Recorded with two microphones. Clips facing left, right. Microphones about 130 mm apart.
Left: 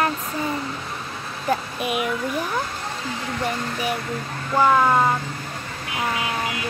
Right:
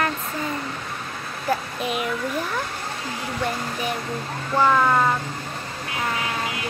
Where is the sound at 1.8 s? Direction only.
15° left (ahead or behind).